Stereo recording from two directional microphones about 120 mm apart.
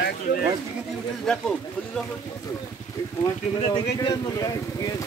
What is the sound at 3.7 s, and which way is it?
Speech, 35° left (ahead or behind).